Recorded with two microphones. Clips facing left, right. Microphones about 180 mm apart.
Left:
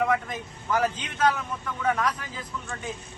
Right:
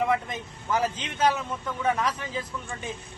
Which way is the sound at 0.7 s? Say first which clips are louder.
Left 1 dB; 25° right (ahead or behind).